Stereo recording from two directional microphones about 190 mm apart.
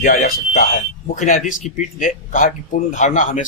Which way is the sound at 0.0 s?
45° left (ahead or behind).